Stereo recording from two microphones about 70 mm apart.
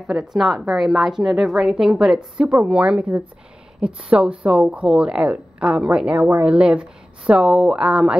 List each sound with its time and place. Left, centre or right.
0.0 s a woman's voice: centre